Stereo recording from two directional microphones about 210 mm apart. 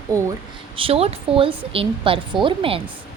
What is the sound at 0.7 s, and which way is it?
A woman's voice, 25° right (ahead or behind).